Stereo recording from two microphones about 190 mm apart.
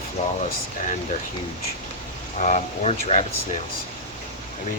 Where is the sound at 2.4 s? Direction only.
35° left (ahead or behind).